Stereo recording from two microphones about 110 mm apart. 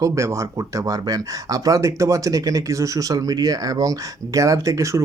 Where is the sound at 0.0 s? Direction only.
25° right (ahead or behind).